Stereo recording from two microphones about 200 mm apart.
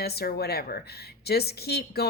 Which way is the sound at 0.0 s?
50° left (ahead or behind).